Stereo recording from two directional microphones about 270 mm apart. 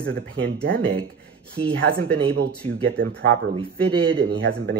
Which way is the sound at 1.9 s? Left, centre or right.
Right.